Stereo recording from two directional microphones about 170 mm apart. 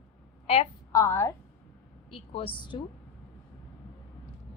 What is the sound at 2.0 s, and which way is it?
Speech, 30° left (ahead or behind).